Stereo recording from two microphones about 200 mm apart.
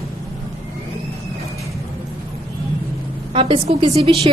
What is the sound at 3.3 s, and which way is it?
A woman's voice, 25° right (ahead or behind).